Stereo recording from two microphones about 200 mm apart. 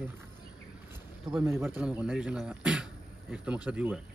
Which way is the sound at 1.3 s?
10° right (ahead or behind).